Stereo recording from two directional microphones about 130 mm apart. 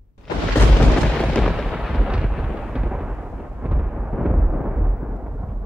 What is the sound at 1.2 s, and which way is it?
Thunder, centre (ahead or behind).